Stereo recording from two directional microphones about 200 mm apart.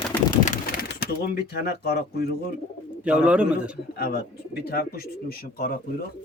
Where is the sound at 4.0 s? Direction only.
50° left (ahead or behind).